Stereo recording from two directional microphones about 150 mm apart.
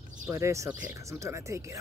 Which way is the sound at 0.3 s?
20° right (ahead or behind).